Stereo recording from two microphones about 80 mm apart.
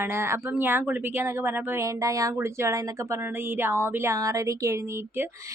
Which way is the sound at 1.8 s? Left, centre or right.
Right.